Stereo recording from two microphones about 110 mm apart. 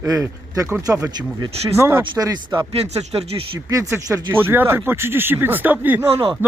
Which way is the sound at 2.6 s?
70° right (ahead or behind).